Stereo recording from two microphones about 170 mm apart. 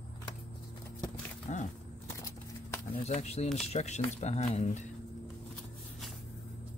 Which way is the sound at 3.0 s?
40° left (ahead or behind).